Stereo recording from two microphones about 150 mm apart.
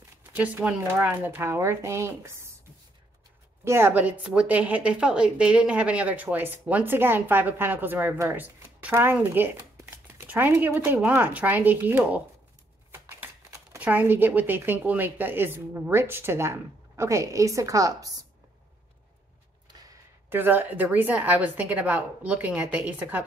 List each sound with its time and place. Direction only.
0.3 s a woman's voice: 10° right (ahead or behind)
3.6 s a woman's voice: 15° right (ahead or behind)
20.2 s a woman's voice: 15° right (ahead or behind)